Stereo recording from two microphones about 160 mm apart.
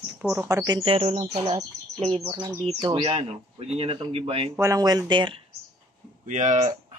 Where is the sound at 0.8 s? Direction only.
40° right (ahead or behind).